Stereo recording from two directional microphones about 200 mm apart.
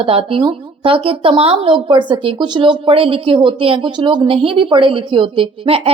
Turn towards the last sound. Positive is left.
turn(degrees=-30)  # may be behind; listen again after turning